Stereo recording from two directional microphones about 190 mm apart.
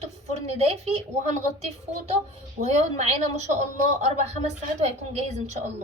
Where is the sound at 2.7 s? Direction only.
35° right (ahead or behind).